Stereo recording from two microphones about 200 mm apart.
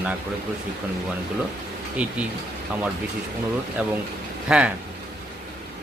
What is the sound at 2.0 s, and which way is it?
Speech, 5° right (ahead or behind).